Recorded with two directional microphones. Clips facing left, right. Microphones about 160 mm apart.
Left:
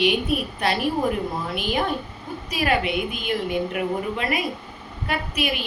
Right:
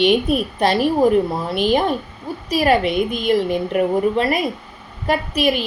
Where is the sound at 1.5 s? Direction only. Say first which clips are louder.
Right 9 dB; 30° right (ahead or behind).